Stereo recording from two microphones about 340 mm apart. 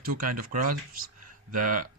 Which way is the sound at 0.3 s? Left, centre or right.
Right.